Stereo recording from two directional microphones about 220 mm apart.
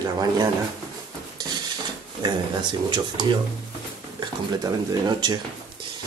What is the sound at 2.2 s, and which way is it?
Speech, 20° right (ahead or behind).